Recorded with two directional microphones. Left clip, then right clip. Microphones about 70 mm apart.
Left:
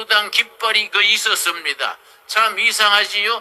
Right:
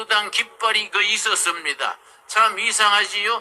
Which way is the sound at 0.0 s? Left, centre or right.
Left.